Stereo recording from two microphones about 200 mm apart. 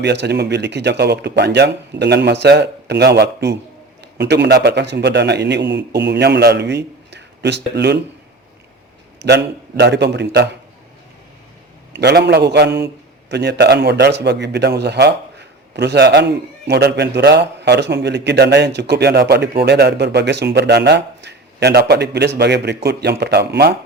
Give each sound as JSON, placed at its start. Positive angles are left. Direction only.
{"t": 0.0, "sound": "a man's voice", "side_deg": -60}
{"t": 9.1, "sound": "a man's voice", "side_deg": -55}
{"t": 11.9, "sound": "a man's voice", "side_deg": -55}